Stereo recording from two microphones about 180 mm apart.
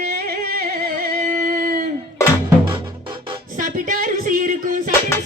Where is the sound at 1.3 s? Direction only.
50° right (ahead or behind).